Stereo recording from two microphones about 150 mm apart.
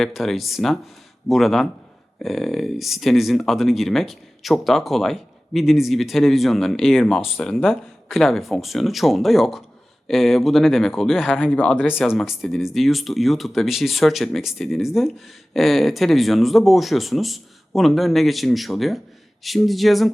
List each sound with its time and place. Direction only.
0.0 s speech: centre (ahead or behind)